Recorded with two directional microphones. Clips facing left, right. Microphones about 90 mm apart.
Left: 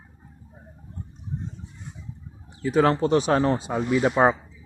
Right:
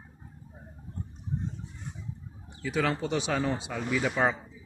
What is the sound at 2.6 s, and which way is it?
Speech, 40° left (ahead or behind).